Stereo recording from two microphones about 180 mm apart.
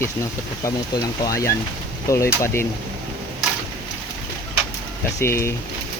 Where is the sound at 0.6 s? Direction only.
20° left (ahead or behind).